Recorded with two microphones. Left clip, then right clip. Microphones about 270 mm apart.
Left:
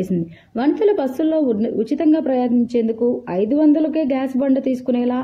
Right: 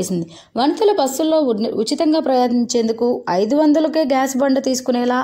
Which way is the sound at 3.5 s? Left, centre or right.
Left.